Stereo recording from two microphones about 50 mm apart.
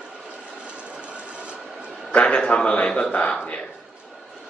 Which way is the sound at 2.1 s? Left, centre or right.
Left.